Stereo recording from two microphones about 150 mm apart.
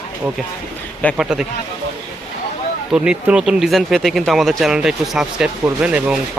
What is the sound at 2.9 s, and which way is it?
Speech, 5° right (ahead or behind).